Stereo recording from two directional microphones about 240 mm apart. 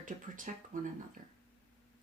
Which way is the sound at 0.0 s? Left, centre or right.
Right.